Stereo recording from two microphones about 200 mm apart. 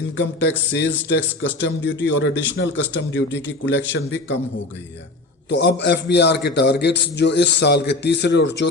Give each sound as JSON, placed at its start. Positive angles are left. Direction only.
{"t": 0.2, "sound": "a man's voice", "side_deg": 65}
{"t": 5.5, "sound": "a man's voice", "side_deg": 60}